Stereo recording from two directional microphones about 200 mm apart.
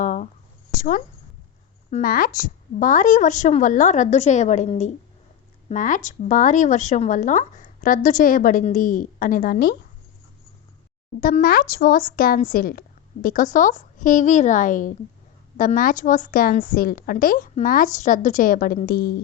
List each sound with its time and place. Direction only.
0.0 s a sound: 40° left (ahead or behind)
0.8 s speech: 45° left (ahead or behind)
11.2 s a woman's voice: 45° left (ahead or behind)